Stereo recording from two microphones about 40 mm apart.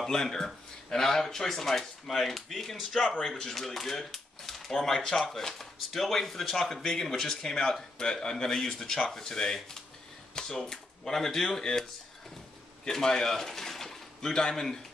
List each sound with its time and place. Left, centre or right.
0.0 s speech: centre
3.2 s speech: centre
10.3 s typewriter: centre
10.7 s speech: centre